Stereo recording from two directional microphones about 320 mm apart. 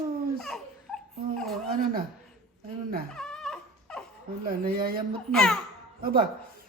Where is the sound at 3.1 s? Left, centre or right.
Centre.